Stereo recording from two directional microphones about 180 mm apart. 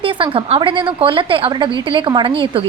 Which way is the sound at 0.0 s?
30° right (ahead or behind).